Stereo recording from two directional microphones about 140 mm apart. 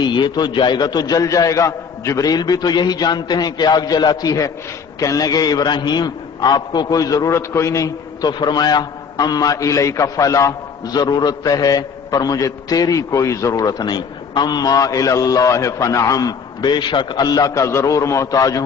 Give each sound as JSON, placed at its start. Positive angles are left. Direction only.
{"t": 0.0, "sound": "a man's voice", "side_deg": 30}